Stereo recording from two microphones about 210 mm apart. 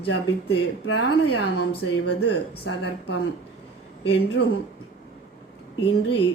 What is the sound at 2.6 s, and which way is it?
Speech, 55° left (ahead or behind).